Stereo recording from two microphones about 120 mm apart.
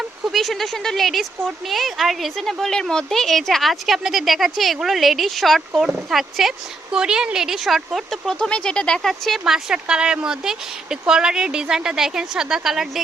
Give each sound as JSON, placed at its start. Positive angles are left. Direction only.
{"t": 0.3, "sound": "a woman's voice", "side_deg": 0}